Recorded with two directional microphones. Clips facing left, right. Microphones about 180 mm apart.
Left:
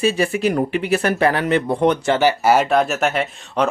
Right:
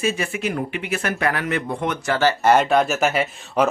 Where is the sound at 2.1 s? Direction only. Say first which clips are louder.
Left 1 dB; 10° left (ahead or behind).